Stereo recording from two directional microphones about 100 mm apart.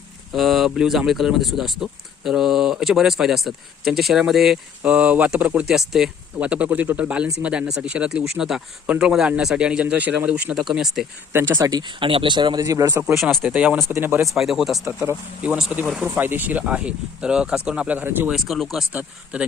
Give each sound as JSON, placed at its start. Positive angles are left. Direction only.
{"t": 0.3, "sound": "a man's voice", "side_deg": 0}
{"t": 11.5, "sound": "speech", "side_deg": -40}
{"t": 12.6, "sound": "speech", "side_deg": -35}
{"t": 13.4, "sound": "a man's voice", "side_deg": -10}
{"t": 13.9, "sound": "speech", "side_deg": -25}
{"t": 14.3, "sound": "a man's voice", "side_deg": -5}
{"t": 18.3, "sound": "speech", "side_deg": 0}
{"t": 18.9, "sound": "a man's voice", "side_deg": -10}